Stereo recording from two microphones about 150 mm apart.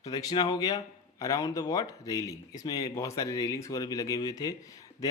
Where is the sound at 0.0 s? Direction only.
25° left (ahead or behind).